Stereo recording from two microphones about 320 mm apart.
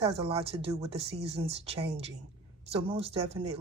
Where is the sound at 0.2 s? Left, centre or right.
Centre.